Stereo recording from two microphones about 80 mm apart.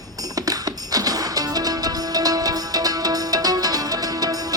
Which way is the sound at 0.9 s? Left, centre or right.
Right.